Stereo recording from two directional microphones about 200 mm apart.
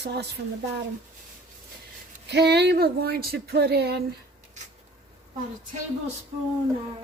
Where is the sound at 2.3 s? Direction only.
55° right (ahead or behind).